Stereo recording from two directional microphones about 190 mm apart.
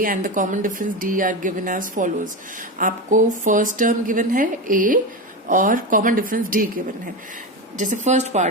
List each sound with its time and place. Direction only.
0.0 s a woman's voice: 45° right (ahead or behind)
8.0 s speech: 40° right (ahead or behind)